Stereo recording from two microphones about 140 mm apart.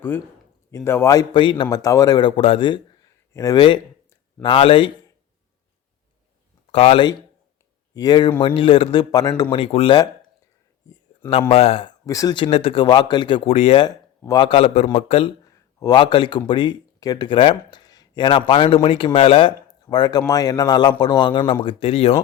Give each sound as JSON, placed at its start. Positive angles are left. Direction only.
{"t": 0.9, "sound": "a man's voice", "side_deg": 20}
{"t": 1.7, "sound": "a man's voice", "side_deg": 25}
{"t": 4.4, "sound": "speech", "side_deg": 40}
{"t": 6.7, "sound": "speech", "side_deg": 45}
{"t": 7.9, "sound": "a man's voice", "side_deg": 30}
{"t": 11.3, "sound": "speech", "side_deg": 40}
{"t": 12.0, "sound": "a man's voice", "side_deg": 25}
{"t": 12.5, "sound": "speech", "side_deg": 45}
{"t": 14.3, "sound": "speech", "side_deg": 30}
{"t": 14.5, "sound": "speech", "side_deg": 45}
{"t": 15.4, "sound": "speech", "side_deg": 30}